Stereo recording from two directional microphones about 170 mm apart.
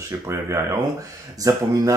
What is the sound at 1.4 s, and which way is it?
Speech, 20° right (ahead or behind).